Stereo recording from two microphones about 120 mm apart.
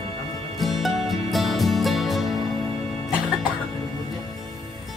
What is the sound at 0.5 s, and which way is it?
Music, centre (ahead or behind).